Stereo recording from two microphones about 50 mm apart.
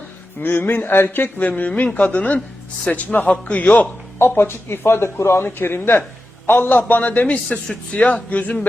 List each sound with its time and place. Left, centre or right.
0.4 s a man's voice: left
4.2 s speech: left
6.5 s a man's voice: left